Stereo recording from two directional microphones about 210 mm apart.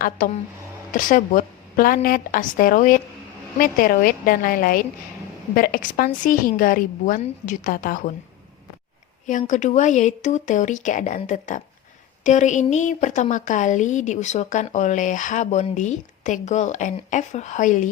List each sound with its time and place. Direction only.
0.0 s a woman's voice: 40° left (ahead or behind)
9.2 s a woman's voice: 35° left (ahead or behind)